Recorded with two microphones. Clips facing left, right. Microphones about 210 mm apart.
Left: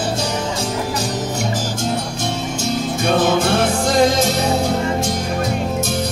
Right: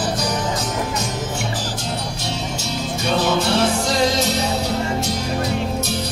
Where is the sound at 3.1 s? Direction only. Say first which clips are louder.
Left 3 dB; 50° left (ahead or behind).